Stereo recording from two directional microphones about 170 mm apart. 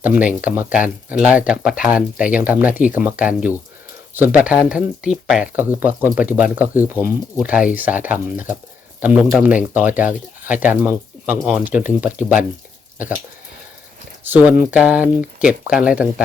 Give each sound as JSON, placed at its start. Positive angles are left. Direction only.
{"t": 0.0, "sound": "speech", "side_deg": -10}
{"t": 14.3, "sound": "speech", "side_deg": -10}